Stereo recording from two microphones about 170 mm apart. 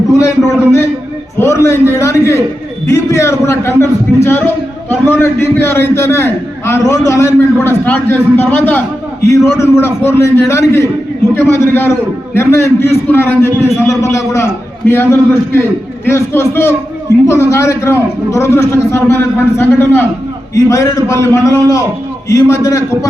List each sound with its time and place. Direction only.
0.1 s a man's voice: 20° left (ahead or behind)
1.4 s a man's voice: 15° left (ahead or behind)